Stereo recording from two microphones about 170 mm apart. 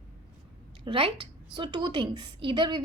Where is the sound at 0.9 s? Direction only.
30° right (ahead or behind).